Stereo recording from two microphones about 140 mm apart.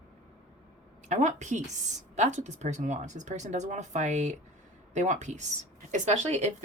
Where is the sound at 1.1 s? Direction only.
60° right (ahead or behind).